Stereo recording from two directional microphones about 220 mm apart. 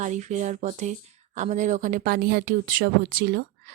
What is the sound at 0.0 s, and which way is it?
Speech, 35° right (ahead or behind).